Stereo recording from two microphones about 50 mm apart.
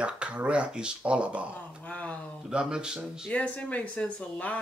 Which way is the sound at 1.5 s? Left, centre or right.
Left.